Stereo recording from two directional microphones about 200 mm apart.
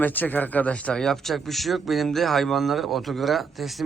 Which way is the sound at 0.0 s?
10° left (ahead or behind).